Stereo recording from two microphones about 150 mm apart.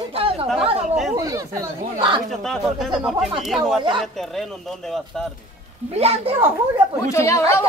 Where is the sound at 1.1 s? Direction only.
20° right (ahead or behind).